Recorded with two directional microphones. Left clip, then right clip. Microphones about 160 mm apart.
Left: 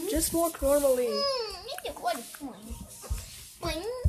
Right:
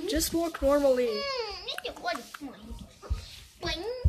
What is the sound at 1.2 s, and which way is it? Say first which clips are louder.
Babbling: left 3 dB; 30° left (ahead or behind).